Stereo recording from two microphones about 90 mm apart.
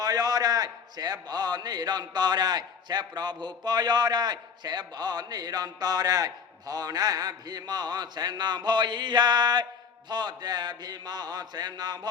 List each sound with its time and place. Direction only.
0.0 s a man's voice: 45° right (ahead or behind)